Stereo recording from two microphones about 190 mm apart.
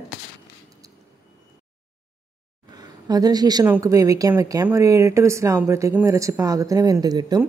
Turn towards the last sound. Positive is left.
turn(degrees=-20)  # may be behind; listen again after turning